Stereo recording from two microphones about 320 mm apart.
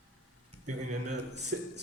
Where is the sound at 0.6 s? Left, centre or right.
Right.